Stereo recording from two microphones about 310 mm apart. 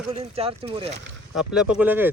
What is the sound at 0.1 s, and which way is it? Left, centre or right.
Speech, centre.